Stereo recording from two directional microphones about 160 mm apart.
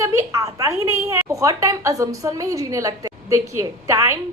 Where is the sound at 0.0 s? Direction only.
20° right (ahead or behind).